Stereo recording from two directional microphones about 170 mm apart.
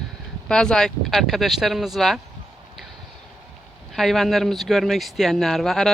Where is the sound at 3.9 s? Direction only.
Centre (ahead or behind).